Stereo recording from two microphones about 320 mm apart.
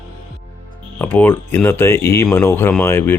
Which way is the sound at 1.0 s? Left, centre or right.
Centre.